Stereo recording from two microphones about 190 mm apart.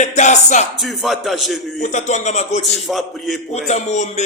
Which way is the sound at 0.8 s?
Centre (ahead or behind).